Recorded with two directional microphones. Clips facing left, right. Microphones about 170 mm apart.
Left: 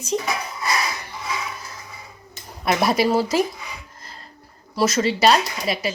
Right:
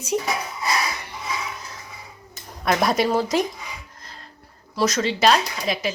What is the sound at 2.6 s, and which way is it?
Speech, 5° left (ahead or behind).